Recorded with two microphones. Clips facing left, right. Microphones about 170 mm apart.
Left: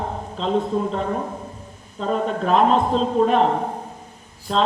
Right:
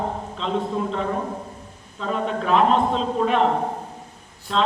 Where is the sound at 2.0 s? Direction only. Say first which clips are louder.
Left 3 dB; 40° left (ahead or behind).